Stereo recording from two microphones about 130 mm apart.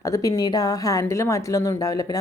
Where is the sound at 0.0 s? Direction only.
25° left (ahead or behind).